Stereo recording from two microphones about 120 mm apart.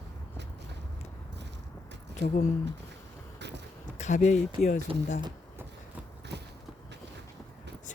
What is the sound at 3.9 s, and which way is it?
Speech, 80° left.